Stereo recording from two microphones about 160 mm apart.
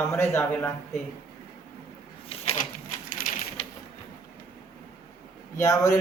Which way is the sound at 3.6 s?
35° left (ahead or behind).